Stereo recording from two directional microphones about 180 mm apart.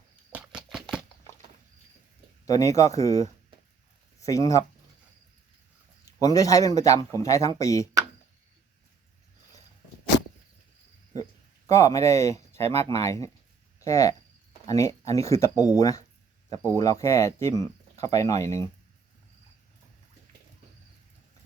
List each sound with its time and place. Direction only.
0.3 s a sound: 5° right (ahead or behind)
2.5 s a man's voice: 15° left (ahead or behind)
6.1 s a man's voice: 20° left (ahead or behind)
11.7 s a man's voice: 15° left (ahead or behind)